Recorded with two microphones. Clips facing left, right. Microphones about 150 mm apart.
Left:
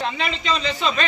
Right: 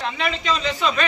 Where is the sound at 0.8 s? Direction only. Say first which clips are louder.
Right 1 dB; 25° left (ahead or behind).